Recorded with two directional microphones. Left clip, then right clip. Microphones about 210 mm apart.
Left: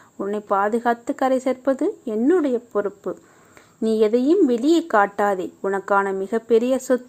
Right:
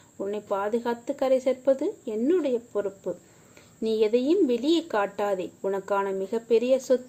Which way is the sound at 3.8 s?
25° left (ahead or behind).